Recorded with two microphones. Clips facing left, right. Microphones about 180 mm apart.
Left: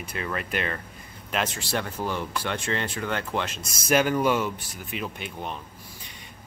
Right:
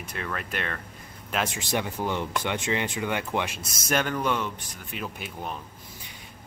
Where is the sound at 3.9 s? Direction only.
5° left (ahead or behind).